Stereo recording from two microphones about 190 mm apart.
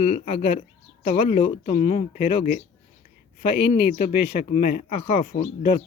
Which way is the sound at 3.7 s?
55° left (ahead or behind).